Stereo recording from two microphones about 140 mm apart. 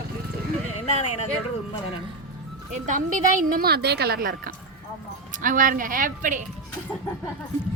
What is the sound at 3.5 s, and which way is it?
A woman's voice, 90° right.